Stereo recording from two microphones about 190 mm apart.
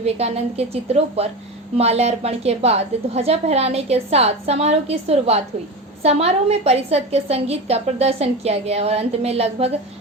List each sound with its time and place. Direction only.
0.0 s a woman's voice: 35° right (ahead or behind)